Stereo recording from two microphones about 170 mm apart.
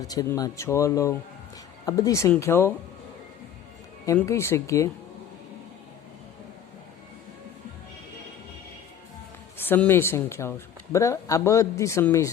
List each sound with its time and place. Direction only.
0.0 s a man's voice: 20° left (ahead or behind)
4.3 s a man's voice: 15° left (ahead or behind)
9.6 s a man's voice: 10° left (ahead or behind)